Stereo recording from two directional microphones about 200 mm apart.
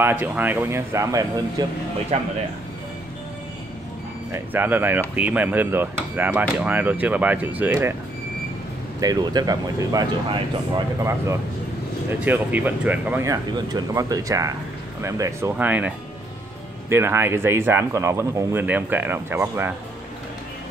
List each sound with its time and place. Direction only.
0.0 s speech: 10° right (ahead or behind)
2.1 s speech: 35° right (ahead or behind)
4.3 s speech: 10° right (ahead or behind)
9.0 s speech: 20° right (ahead or behind)
16.9 s speech: 10° right (ahead or behind)